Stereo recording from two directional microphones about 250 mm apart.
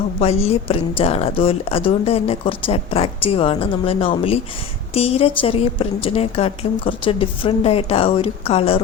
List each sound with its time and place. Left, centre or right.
0.2 s a woman's voice: left